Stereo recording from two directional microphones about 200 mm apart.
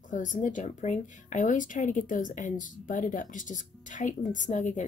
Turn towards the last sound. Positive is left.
turn(degrees=35)  # may be behind; listen again after turning